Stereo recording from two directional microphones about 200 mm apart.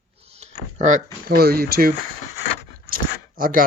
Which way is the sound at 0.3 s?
35° right (ahead or behind).